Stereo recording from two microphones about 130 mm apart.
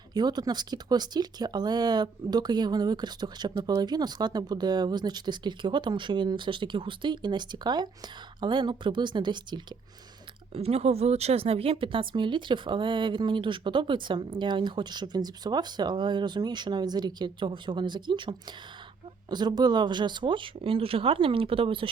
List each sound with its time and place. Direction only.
0.1 s speech: 30° right (ahead or behind)
10.5 s speech: 50° right (ahead or behind)